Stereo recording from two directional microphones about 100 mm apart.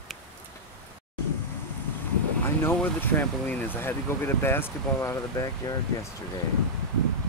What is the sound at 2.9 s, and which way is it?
Speech, 20° left (ahead or behind).